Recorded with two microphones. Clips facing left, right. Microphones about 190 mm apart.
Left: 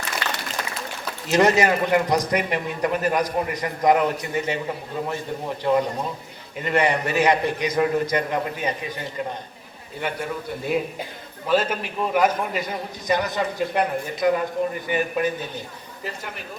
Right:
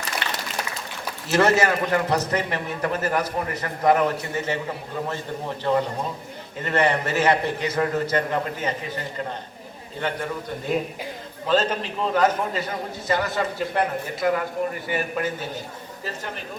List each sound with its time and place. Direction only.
1.3 s a man's voice: 15° left (ahead or behind)
10.0 s a man's voice: 10° left (ahead or behind)